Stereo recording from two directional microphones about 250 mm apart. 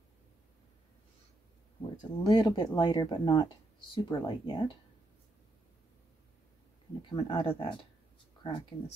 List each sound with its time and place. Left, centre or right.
2.0 s speech: left
7.0 s speech: centre